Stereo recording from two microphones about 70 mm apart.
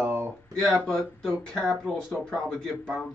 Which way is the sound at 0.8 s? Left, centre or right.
Centre.